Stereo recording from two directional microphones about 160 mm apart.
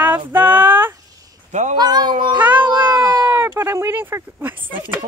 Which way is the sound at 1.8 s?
25° right (ahead or behind).